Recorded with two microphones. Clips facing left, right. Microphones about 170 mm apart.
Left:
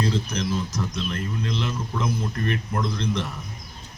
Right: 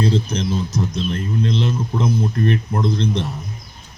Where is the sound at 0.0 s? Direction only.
30° right (ahead or behind).